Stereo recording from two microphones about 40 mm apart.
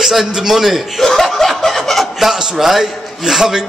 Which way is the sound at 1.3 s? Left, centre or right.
Centre.